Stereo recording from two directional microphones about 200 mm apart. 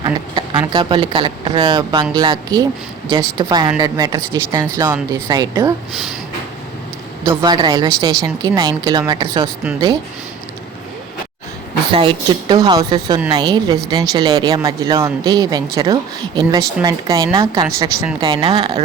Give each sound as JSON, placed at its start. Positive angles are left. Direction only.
{"t": 0.0, "sound": "speech", "side_deg": -20}
{"t": 7.3, "sound": "speech", "side_deg": -20}
{"t": 11.9, "sound": "speech", "side_deg": -25}